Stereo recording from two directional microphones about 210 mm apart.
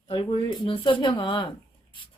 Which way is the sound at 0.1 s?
25° left (ahead or behind).